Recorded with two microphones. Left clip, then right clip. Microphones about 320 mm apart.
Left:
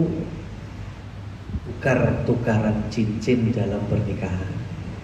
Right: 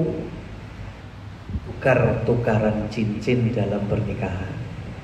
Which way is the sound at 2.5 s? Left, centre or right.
Centre.